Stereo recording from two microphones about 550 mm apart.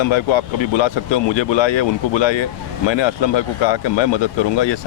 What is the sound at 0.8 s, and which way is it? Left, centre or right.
Speech, left.